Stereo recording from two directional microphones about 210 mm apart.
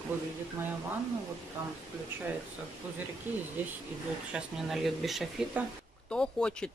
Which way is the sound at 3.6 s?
10° right (ahead or behind).